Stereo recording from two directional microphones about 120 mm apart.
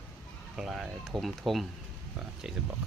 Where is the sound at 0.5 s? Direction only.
5° right (ahead or behind).